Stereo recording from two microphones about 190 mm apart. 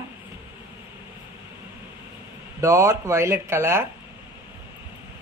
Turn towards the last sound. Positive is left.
turn(degrees=-15)  # may be behind; listen again after turning